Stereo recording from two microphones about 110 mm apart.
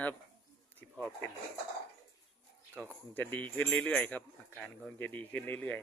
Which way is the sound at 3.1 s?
15° left (ahead or behind).